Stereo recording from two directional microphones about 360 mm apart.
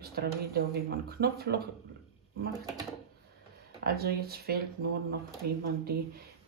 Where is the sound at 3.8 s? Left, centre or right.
Right.